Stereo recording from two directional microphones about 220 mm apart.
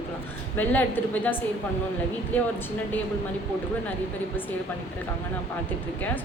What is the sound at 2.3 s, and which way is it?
Speech, 10° left (ahead or behind).